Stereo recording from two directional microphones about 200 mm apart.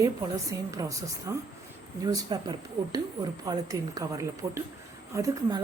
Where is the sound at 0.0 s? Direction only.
15° right (ahead or behind).